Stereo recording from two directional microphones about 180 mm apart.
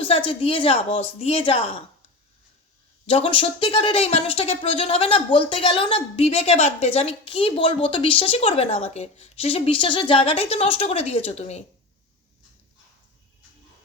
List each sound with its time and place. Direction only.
0.0 s speech: 30° left (ahead or behind)
3.1 s speech: 30° left (ahead or behind)